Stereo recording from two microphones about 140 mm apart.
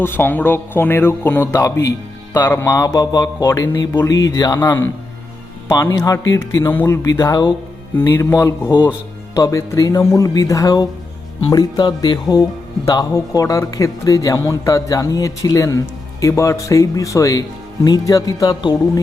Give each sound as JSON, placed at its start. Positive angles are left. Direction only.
{"t": 0.0, "sound": "speech", "side_deg": 15}